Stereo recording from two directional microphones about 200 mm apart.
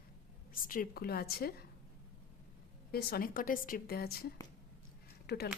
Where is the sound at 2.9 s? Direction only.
50° left (ahead or behind).